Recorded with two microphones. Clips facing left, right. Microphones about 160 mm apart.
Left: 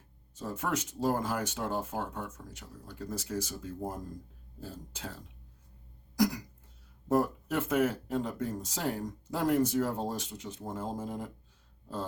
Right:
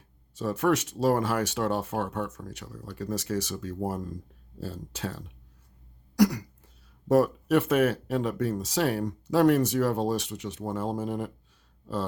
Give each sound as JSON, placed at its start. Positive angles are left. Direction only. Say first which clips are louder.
{"t": 0.3, "sound": "speech", "louder": "right 9 dB", "side_deg": -80}